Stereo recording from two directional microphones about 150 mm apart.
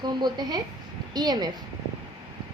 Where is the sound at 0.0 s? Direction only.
30° right (ahead or behind).